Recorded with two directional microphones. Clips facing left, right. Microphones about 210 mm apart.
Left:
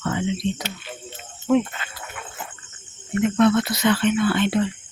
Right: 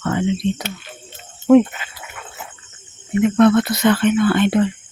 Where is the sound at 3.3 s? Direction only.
55° right (ahead or behind).